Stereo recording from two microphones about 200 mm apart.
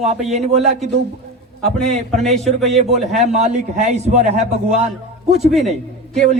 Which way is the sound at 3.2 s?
35° right (ahead or behind).